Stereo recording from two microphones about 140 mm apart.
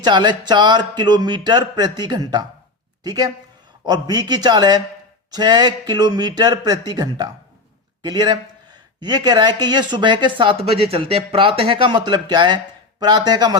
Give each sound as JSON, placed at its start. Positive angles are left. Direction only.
{"t": 0.0, "sound": "speech", "side_deg": -30}